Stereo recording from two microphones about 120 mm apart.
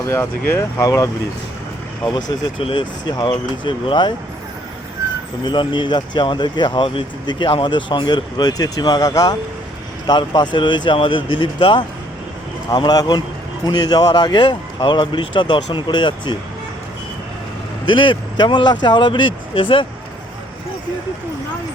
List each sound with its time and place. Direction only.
0.0 s speech: 20° left (ahead or behind)
2.6 s speech: 50° left (ahead or behind)
3.1 s speech: 40° left (ahead or behind)
5.5 s speech: 40° left (ahead or behind)
17.8 s speech: 40° left (ahead or behind)